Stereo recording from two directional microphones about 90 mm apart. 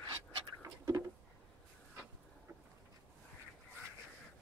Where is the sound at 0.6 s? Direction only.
40° right (ahead or behind).